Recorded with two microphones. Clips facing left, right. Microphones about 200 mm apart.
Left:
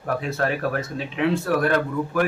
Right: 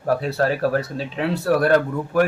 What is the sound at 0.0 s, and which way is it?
Speech, 35° right (ahead or behind).